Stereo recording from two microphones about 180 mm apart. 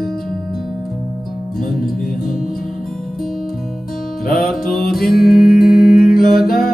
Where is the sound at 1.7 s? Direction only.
Centre (ahead or behind).